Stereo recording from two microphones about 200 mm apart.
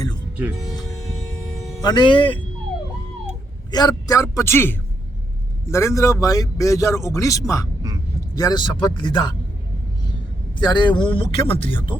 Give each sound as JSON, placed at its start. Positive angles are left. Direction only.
{"t": 0.6, "sound": "hum", "side_deg": 20}
{"t": 1.8, "sound": "speech", "side_deg": 20}
{"t": 3.7, "sound": "a man's voice", "side_deg": 20}
{"t": 10.6, "sound": "speech", "side_deg": 20}